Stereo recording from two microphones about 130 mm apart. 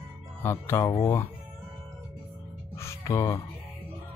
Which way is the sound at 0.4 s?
20° left (ahead or behind).